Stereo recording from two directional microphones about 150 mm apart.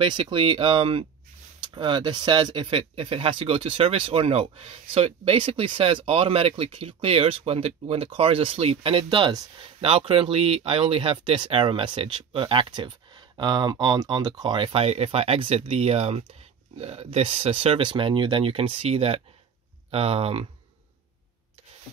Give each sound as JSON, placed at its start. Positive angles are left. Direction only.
{"t": 0.0, "sound": "speech", "side_deg": -35}